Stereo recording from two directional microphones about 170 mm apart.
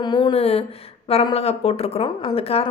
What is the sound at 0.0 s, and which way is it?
A woman's voice, 30° left (ahead or behind).